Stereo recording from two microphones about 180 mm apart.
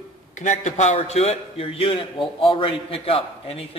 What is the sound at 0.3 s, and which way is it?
A man's voice, 40° left (ahead or behind).